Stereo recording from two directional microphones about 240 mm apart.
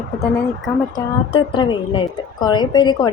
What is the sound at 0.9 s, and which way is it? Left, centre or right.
A woman's voice, centre.